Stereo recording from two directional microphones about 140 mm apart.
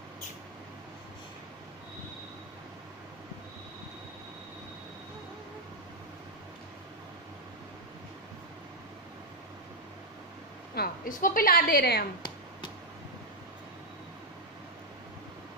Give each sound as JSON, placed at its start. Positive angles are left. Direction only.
{"t": 11.1, "sound": "a woman's voice", "side_deg": 80}